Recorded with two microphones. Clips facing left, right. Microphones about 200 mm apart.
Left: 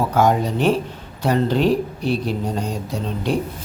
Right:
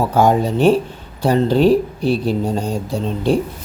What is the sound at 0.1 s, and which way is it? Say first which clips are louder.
Speech: right 3 dB; 30° right (ahead or behind).